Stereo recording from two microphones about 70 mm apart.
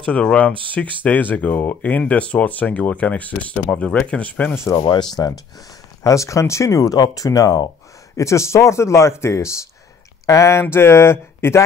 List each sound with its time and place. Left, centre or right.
0.0 s speech: centre
4.7 s speech: left
6.0 s speech: left
8.2 s speech: left